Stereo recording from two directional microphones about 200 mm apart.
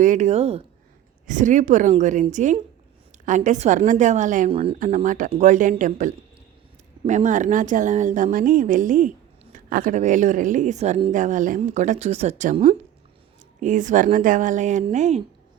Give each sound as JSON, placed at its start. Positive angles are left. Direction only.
{"t": 0.0, "sound": "speech", "side_deg": -40}